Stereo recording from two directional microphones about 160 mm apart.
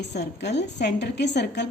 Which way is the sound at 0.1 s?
90° left.